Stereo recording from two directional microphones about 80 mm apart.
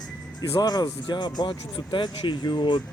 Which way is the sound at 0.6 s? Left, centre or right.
Left.